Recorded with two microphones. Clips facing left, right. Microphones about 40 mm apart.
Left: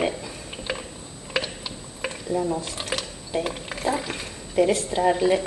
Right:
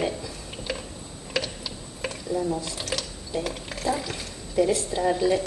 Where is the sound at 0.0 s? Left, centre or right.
Left.